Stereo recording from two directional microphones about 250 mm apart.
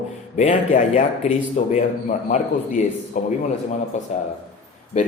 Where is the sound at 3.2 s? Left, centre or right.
Left.